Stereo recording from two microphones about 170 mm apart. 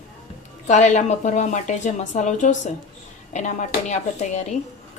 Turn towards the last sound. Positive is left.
turn(degrees=40)  # may be behind; listen again after turning